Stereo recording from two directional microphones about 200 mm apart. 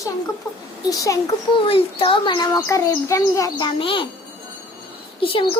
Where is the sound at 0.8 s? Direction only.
20° left (ahead or behind).